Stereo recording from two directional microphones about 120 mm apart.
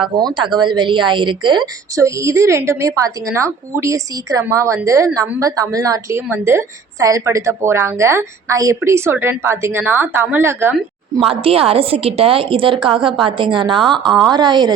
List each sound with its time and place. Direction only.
0.0 s speech: 40° right (ahead or behind)
2.0 s a woman's voice: 25° right (ahead or behind)
11.3 s a woman's voice: 50° right (ahead or behind)
13.8 s a woman's voice: centre (ahead or behind)
14.3 s speech: 40° right (ahead or behind)